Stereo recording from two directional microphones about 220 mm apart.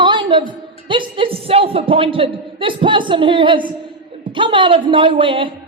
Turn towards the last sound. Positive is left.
turn(degrees=-25)  # may be behind; listen again after turning